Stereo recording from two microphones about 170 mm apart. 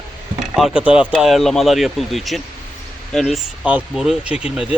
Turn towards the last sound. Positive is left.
turn(degrees=-5)  # may be behind; listen again after turning